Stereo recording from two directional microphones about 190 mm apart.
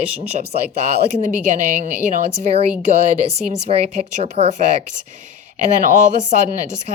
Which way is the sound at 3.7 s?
35° right (ahead or behind).